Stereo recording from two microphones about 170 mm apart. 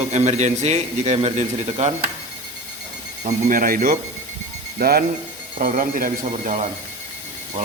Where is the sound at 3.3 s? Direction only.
50° right (ahead or behind).